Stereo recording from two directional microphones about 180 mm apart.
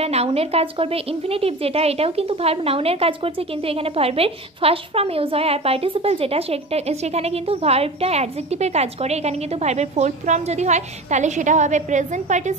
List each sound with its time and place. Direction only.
0.0 s a woman's voice: 35° right (ahead or behind)